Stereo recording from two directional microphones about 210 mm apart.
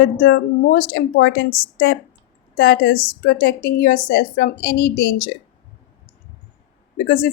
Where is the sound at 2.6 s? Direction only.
45° left (ahead or behind).